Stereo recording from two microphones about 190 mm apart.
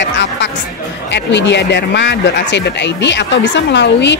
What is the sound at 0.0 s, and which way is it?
Music, 70° left (ahead or behind).